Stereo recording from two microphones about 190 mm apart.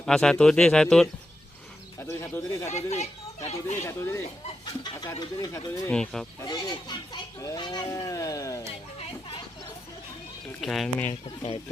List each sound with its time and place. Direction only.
0.0 s speech: 5° left (ahead or behind)
2.6 s speech: 35° left (ahead or behind)
3.8 s speech: 15° left (ahead or behind)
5.9 s speech: 5° left (ahead or behind)
6.4 s speech: 20° left (ahead or behind)
10.6 s speech: centre (ahead or behind)